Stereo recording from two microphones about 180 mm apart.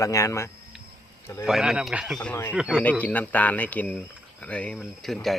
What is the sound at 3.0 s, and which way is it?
Speech, 10° left (ahead or behind).